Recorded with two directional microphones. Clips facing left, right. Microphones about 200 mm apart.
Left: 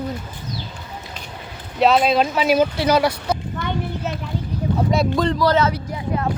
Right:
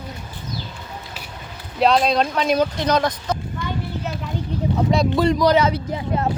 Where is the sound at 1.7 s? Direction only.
5° left (ahead or behind).